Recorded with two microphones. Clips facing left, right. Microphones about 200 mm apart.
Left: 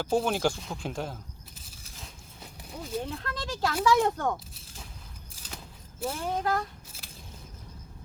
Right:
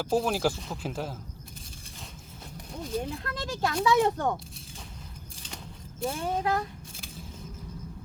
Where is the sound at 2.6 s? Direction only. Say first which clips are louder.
Right 2 dB; 5° left (ahead or behind).